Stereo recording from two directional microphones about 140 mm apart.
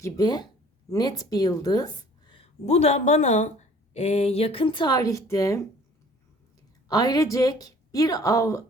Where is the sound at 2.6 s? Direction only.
50° left (ahead or behind); by 5.6 s 20° left (ahead or behind).